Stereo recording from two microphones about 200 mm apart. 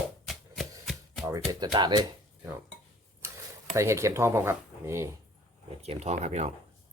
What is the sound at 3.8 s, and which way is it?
Speech, 15° right (ahead or behind).